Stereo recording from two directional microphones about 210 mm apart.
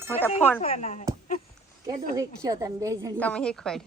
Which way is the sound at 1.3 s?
45° left (ahead or behind).